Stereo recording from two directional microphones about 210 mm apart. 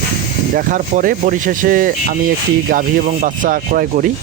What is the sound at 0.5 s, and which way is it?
Speech, 40° right (ahead or behind).